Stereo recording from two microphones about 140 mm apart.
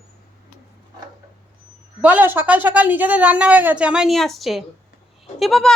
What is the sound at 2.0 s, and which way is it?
A woman's voice, 10° right (ahead or behind).